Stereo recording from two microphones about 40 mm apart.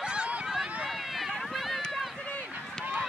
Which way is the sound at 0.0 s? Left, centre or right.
Right.